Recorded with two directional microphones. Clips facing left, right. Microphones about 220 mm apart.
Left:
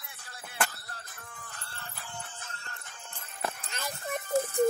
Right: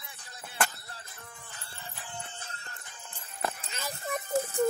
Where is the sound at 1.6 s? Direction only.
15° right (ahead or behind).